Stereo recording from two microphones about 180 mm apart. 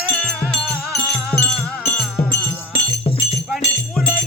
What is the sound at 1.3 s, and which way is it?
Music, 30° left (ahead or behind).